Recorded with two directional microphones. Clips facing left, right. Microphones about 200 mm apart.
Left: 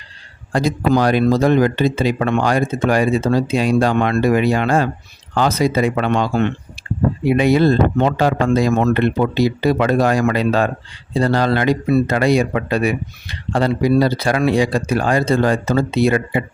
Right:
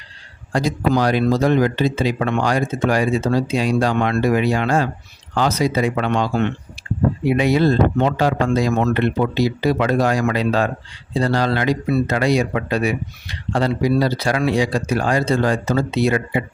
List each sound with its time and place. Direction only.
0.5 s speech: 55° left (ahead or behind)
7.3 s speech: 55° left (ahead or behind)